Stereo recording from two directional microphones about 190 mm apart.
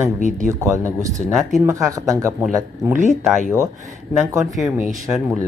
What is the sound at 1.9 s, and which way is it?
Speech, 15° right (ahead or behind).